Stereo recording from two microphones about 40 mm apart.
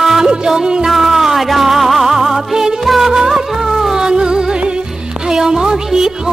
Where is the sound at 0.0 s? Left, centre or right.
Centre.